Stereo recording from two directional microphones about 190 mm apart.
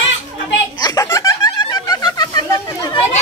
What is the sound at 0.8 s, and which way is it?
Snicker, 15° left (ahead or behind).